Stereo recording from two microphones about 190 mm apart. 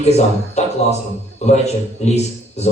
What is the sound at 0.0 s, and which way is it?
A man's voice, 35° left (ahead or behind).